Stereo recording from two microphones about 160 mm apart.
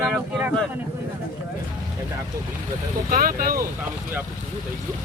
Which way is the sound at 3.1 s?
65° right (ahead or behind).